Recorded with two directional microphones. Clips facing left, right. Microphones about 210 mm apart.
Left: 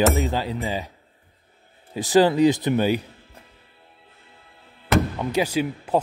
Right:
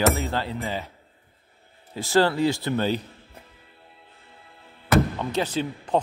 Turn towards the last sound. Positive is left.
turn(degrees=10)  # may be behind; listen again after turning